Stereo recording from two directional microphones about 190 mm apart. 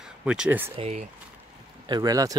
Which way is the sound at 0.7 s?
35° right (ahead or behind).